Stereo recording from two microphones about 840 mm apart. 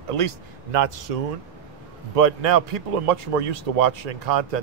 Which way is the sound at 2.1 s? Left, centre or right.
Right.